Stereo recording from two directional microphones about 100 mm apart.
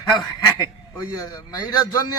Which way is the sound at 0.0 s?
40° left (ahead or behind).